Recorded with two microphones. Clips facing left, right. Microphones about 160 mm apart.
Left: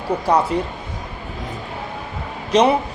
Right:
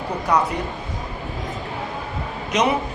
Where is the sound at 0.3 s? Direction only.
30° left (ahead or behind).